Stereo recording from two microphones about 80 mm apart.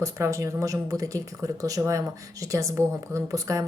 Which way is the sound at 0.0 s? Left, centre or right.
Right.